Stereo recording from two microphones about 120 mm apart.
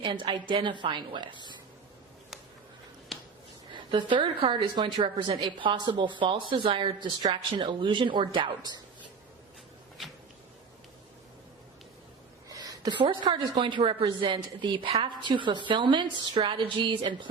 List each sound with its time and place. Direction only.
0.0 s a woman's voice: 40° right (ahead or behind)
3.9 s a woman's voice: 40° right (ahead or behind)
12.5 s a sound: 30° right (ahead or behind)
13.0 s a woman's voice: 45° right (ahead or behind)